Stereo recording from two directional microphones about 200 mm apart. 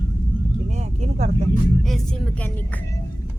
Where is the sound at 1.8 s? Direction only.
Centre (ahead or behind).